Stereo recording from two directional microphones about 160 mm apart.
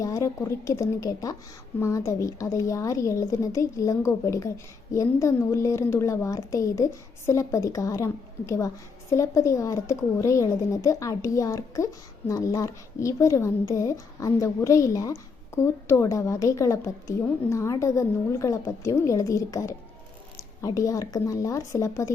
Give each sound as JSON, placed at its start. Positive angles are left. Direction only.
{"t": 0.0, "sound": "a woman's voice", "side_deg": 20}